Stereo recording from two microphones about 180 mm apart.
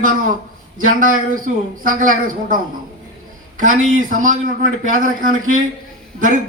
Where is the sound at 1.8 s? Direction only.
50° right (ahead or behind).